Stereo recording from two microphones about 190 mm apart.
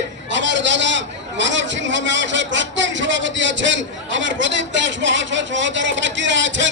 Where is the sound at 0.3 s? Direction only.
75° right (ahead or behind).